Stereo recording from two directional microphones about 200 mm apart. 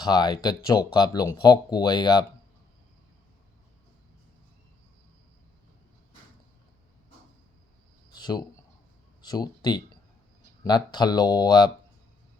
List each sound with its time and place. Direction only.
0.0 s speech: 20° left (ahead or behind)
8.1 s a sound: 20° left (ahead or behind)
9.2 s speech: 20° left (ahead or behind)